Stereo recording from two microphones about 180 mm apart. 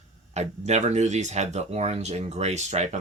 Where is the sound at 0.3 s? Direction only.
40° right (ahead or behind).